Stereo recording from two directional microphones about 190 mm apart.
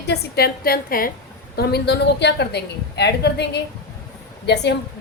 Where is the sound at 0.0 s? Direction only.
60° left (ahead or behind).